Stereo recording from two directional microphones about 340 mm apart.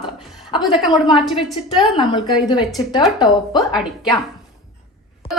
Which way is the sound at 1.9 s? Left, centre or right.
Centre.